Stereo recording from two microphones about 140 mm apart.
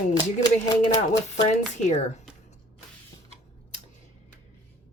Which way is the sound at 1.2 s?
55° left (ahead or behind).